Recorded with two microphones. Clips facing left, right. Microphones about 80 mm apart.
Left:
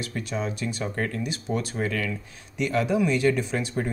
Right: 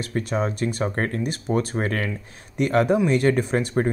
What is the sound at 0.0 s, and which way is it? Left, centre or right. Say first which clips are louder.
Speech: right 5 dB; right.